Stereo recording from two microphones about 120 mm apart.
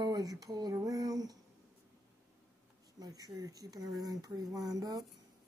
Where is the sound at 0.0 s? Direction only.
35° right (ahead or behind).